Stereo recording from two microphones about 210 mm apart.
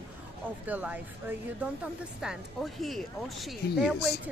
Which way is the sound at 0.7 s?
10° right (ahead or behind).